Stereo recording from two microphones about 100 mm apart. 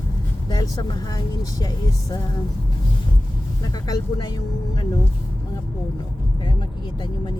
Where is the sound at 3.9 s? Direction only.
40° left (ahead or behind).